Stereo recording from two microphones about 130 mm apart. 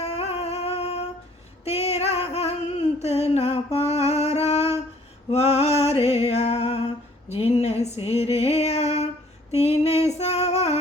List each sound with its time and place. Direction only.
0.0 s music: 55° left (ahead or behind)
5.3 s a sound: 55° left (ahead or behind)
10.2 s female singing: 55° left (ahead or behind)